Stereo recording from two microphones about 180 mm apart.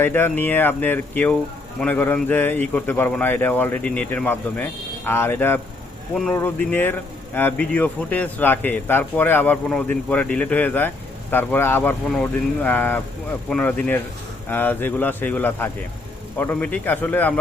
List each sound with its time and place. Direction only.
0.0 s speech: 10° left (ahead or behind)